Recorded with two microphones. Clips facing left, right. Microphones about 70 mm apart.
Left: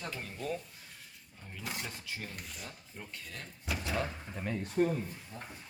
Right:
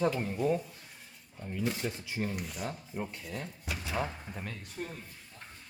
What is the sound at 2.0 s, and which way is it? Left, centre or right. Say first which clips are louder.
Speech: right 8 dB; centre.